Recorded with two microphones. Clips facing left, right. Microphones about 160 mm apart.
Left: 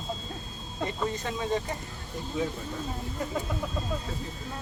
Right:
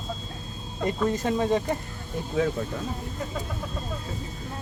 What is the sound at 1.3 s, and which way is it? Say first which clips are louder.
Speech: right 6 dB; 45° right (ahead or behind).